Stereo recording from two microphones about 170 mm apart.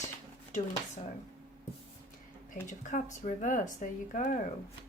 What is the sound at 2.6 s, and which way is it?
Speech, 45° left (ahead or behind).